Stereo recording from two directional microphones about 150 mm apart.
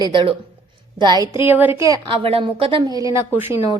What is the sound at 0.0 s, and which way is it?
A woman's voice, 35° right (ahead or behind).